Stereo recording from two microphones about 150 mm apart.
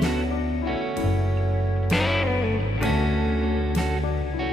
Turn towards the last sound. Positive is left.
turn(degrees=0)  # may be behind; listen again after turning